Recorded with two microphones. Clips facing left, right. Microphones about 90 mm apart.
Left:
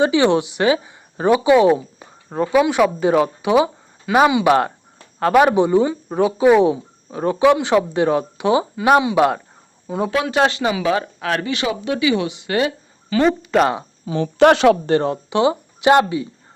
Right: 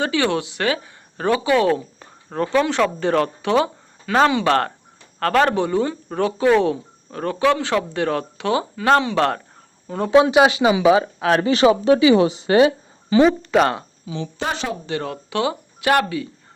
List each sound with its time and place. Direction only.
0.0 s speech: 20° left (ahead or behind)
10.1 s speech: 25° right (ahead or behind)
10.3 s speech: 10° right (ahead or behind)
11.4 s speech: 35° right (ahead or behind)
13.2 s speech: centre (ahead or behind)
14.0 s a woman's voice: 50° left (ahead or behind); by 14.8 s 70° left (ahead or behind)
15.0 s speech: 25° left (ahead or behind)